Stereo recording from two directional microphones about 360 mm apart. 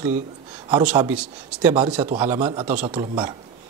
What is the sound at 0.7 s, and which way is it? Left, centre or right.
Speech, centre.